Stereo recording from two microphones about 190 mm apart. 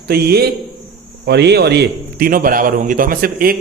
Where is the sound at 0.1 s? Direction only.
55° right (ahead or behind).